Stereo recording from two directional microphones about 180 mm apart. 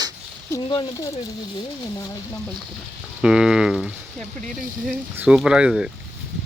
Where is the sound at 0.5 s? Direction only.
20° left (ahead or behind).